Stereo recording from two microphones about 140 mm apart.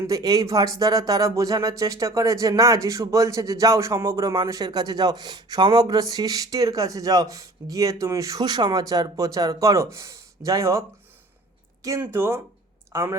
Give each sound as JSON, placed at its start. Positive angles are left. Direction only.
{"t": 0.1, "sound": "a woman's voice", "side_deg": -25}